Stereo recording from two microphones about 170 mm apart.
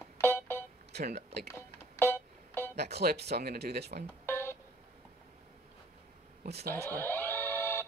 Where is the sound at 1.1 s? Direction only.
70° right (ahead or behind).